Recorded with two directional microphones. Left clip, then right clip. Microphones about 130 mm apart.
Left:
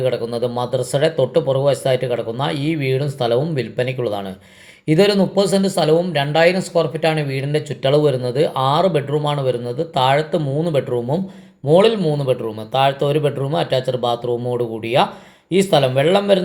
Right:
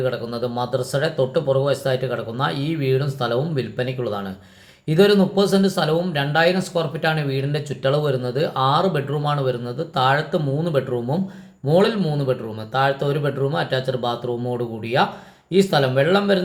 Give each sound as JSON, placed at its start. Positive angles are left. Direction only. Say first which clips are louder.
{"t": 0.0, "sound": "speech", "louder": "left 4 dB", "side_deg": 20}